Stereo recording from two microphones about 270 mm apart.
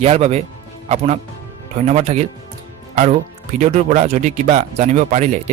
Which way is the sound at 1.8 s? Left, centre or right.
Right.